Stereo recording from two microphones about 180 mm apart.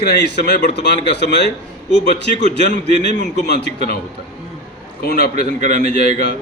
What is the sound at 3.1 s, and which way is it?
Speech, 70° left (ahead or behind).